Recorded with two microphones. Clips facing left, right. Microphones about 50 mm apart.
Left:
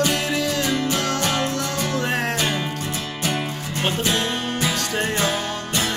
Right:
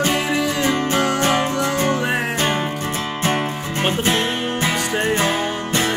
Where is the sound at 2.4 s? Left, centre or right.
Right.